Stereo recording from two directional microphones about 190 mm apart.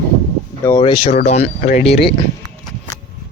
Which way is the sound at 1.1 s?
35° left (ahead or behind).